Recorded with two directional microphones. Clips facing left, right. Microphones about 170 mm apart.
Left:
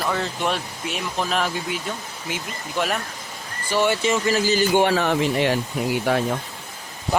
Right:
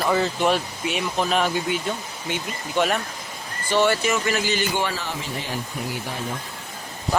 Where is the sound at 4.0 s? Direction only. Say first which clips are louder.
Left 3 dB; 30° left (ahead or behind).